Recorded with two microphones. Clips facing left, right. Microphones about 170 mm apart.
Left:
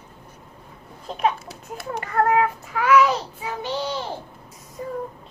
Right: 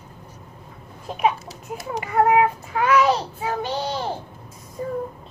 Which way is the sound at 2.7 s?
35° right (ahead or behind).